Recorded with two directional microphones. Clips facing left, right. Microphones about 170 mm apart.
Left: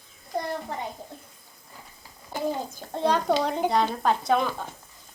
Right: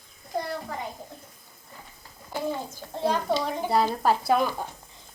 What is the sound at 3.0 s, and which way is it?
Speech, 75° left (ahead or behind).